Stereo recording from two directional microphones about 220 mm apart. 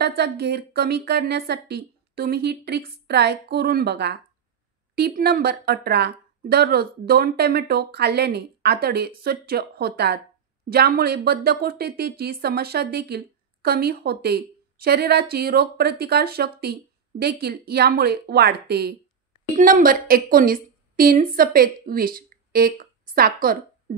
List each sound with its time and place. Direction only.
0.0 s a woman's voice: 45° right (ahead or behind)